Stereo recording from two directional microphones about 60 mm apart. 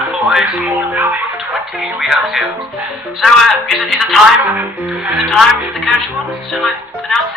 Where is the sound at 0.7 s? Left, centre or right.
Right.